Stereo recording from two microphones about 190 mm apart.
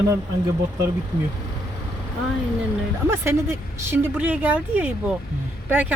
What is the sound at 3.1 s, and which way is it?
Speech, 15° right (ahead or behind).